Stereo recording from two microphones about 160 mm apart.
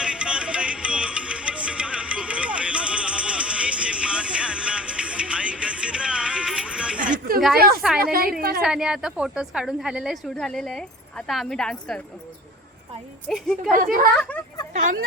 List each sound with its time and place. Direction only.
0.0 s music: 5° right (ahead or behind)
7.0 s a sound: 60° right (ahead or behind)
7.8 s a woman's voice: centre (ahead or behind)
8.4 s a woman's voice: 70° right (ahead or behind)
8.6 s a woman's voice: 5° right (ahead or behind)
13.2 s a woman's voice: 5° left (ahead or behind)